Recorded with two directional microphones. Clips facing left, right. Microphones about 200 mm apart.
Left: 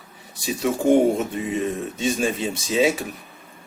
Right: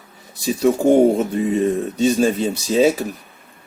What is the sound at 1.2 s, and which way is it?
Speech, 35° right (ahead or behind).